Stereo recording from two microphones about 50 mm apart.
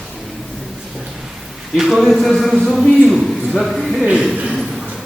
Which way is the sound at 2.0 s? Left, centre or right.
Centre.